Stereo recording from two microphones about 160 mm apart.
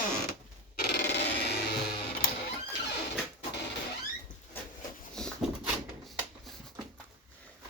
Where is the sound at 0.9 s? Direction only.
90° left.